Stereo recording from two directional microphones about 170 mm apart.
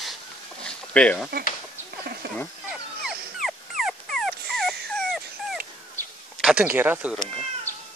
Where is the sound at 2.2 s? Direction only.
65° right (ahead or behind).